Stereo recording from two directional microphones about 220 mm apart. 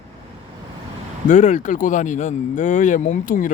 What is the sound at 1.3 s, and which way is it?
Speech, 30° left (ahead or behind).